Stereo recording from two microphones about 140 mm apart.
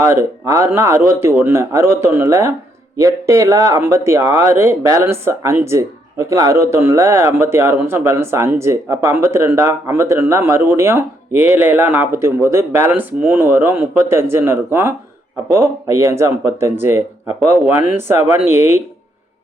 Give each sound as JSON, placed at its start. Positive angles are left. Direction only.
{"t": 0.0, "sound": "speech", "side_deg": -20}